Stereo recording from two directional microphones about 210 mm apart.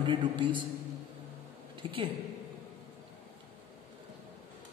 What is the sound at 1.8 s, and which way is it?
Speech, 25° right (ahead or behind).